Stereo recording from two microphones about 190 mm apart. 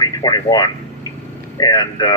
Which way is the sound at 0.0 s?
20° left (ahead or behind).